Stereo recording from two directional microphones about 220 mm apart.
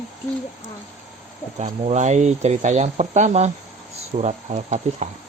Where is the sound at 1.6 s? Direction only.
30° right (ahead or behind).